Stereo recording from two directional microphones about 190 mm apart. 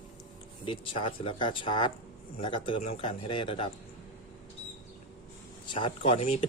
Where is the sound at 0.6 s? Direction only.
25° left (ahead or behind).